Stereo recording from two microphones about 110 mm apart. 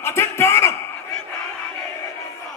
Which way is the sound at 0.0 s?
25° left (ahead or behind).